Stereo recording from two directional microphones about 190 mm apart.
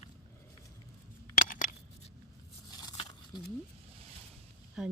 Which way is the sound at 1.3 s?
45° left (ahead or behind).